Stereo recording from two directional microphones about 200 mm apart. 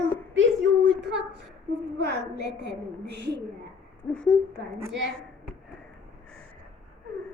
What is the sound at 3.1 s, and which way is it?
Speech, 60° right (ahead or behind).